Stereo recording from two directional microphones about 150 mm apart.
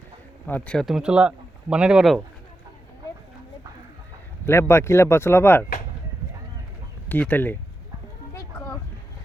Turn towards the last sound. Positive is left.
turn(degrees=10)  # may be behind; listen again after turning